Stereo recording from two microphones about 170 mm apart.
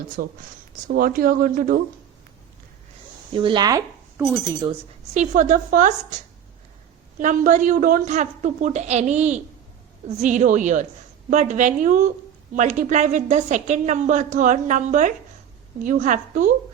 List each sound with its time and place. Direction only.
0.2 s speech: 55° right (ahead or behind)
3.3 s speech: 30° right (ahead or behind)
5.1 s a woman's voice: 45° right (ahead or behind)
7.2 s a woman's voice: 50° right (ahead or behind)